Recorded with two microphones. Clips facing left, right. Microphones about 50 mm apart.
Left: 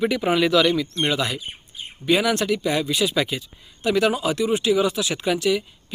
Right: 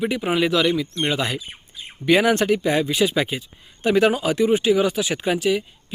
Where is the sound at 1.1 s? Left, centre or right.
Right.